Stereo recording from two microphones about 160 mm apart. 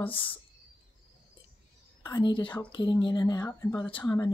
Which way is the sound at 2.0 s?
25° left (ahead or behind).